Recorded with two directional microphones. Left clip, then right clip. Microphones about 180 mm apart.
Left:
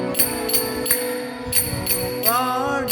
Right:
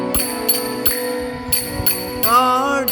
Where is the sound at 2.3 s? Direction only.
40° right (ahead or behind).